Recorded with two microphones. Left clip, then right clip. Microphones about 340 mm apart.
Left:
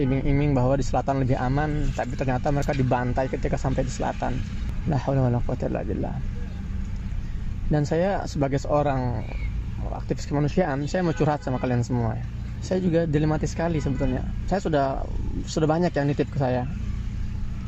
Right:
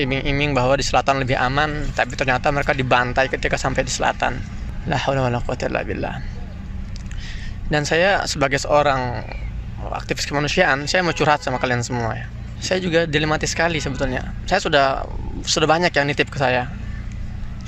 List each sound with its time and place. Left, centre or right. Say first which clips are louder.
0.0 s speech: right 5 dB; right
3.8 s speech: right 8 dB; right
4.1 s speech: right 7 dB; right
7.7 s speech: right 7 dB; right
12.8 s speech: right 4 dB; right
15.4 s speech: right 7 dB; right